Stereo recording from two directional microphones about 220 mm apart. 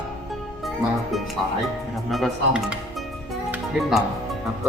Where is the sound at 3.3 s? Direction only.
Centre (ahead or behind).